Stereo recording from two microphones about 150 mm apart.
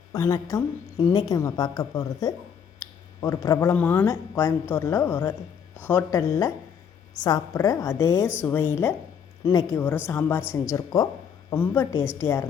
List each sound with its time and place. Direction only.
0.1 s speech: 25° left (ahead or behind)